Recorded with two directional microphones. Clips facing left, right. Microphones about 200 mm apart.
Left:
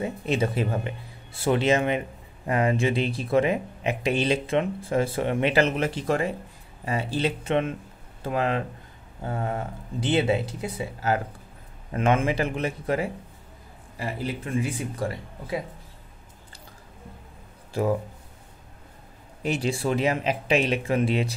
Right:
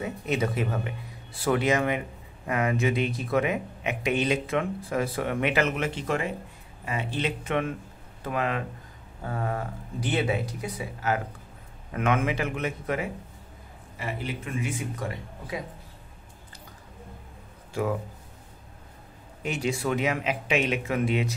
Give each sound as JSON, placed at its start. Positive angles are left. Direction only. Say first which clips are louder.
{"t": 0.0, "sound": "speech", "louder": "left 2 dB", "side_deg": 30}
{"t": 19.4, "sound": "speech", "louder": "left 2 dB", "side_deg": 35}